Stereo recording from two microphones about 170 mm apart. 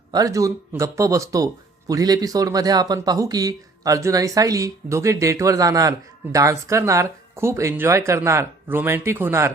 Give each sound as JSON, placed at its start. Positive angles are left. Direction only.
{"t": 0.1, "sound": "speech", "side_deg": -20}